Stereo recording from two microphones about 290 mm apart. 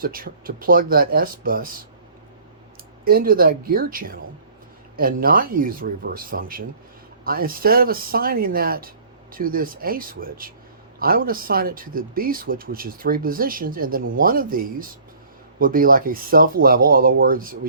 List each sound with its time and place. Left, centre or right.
0.0 s speech: right
3.0 s speech: right